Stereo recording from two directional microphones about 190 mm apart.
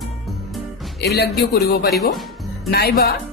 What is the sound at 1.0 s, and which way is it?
A woman's voice, 60° left (ahead or behind).